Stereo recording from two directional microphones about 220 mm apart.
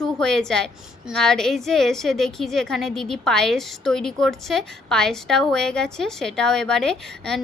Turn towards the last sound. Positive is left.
turn(degrees=0)  # may be behind; listen again after turning